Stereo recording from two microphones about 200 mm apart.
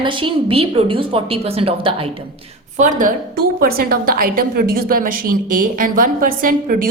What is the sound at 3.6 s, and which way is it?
A woman's voice, 50° right (ahead or behind).